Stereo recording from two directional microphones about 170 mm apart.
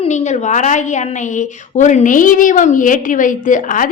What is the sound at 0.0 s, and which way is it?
A woman's voice, 45° left (ahead or behind).